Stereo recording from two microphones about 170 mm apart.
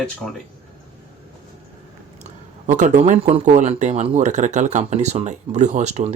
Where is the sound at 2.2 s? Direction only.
45° right (ahead or behind).